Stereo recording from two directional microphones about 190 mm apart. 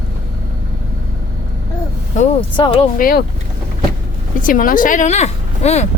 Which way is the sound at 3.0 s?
50° left (ahead or behind).